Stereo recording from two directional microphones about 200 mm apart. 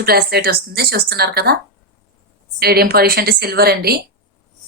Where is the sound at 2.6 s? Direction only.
50° right (ahead or behind).